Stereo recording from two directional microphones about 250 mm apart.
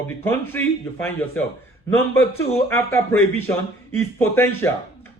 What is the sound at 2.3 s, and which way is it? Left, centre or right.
Speech, left.